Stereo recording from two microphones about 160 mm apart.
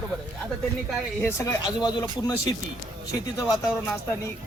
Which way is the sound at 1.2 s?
15° left (ahead or behind).